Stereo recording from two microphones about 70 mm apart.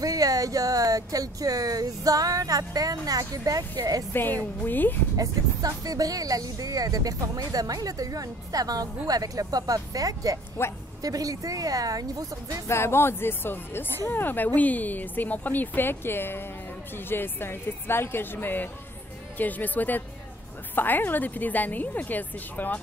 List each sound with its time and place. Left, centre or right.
0.0 s speech: right
4.1 s speech: left
5.1 s speech: right
12.6 s speech: left